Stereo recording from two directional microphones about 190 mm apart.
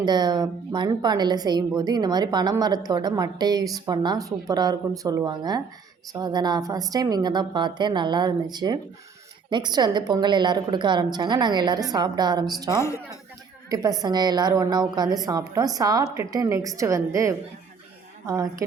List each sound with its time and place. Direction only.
0.0 s a woman's voice: 20° right (ahead or behind)
12.8 s a woman's voice: 15° left (ahead or behind)
13.7 s a woman's voice: 20° right (ahead or behind)